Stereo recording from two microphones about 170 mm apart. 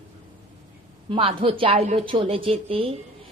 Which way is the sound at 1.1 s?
30° right (ahead or behind).